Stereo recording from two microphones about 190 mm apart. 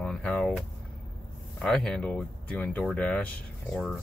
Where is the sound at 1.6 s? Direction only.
Centre (ahead or behind).